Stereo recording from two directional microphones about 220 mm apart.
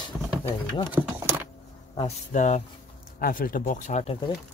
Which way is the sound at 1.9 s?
30° left (ahead or behind).